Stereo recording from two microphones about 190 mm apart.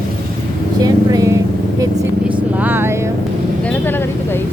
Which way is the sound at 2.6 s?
10° right (ahead or behind).